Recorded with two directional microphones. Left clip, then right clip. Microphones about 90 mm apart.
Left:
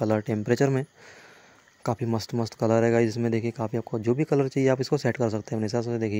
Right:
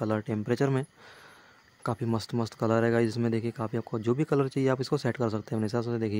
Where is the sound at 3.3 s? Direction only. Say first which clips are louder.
Left 3 dB; 20° left (ahead or behind).